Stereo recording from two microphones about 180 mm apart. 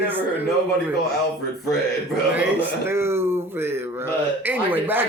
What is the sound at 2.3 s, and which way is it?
A man's voice, 10° right (ahead or behind).